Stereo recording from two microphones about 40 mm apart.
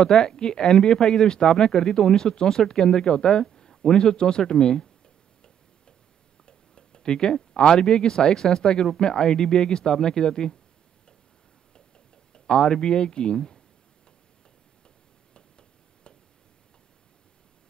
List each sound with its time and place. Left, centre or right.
0.0 s speech: centre
12.3 s speech: centre